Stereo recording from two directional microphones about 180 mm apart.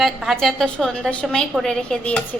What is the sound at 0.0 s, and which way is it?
A woman's voice, centre (ahead or behind).